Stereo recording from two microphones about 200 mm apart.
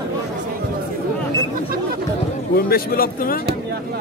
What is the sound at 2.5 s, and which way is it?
Speech, 50° left (ahead or behind).